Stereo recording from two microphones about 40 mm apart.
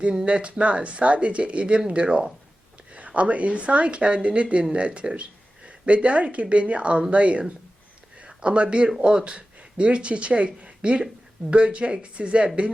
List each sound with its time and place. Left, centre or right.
0.0 s speech: centre
0.3 s speech: right